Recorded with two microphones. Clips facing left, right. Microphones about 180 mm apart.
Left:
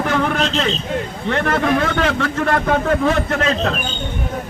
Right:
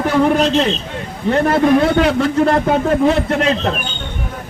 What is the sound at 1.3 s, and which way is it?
A man's voice, 30° right (ahead or behind).